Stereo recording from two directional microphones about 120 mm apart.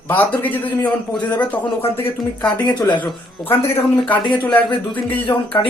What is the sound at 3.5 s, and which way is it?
Speech, 15° left (ahead or behind).